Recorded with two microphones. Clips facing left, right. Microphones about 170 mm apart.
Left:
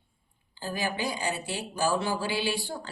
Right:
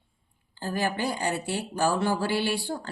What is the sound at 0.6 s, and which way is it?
Speech, 55° right (ahead or behind).